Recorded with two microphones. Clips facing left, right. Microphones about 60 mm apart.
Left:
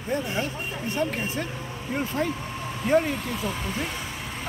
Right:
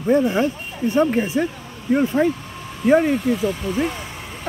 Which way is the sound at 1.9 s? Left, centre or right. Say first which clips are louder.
Right 10 dB; centre.